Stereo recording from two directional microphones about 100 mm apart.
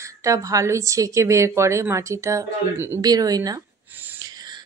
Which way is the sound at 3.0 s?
40° right (ahead or behind).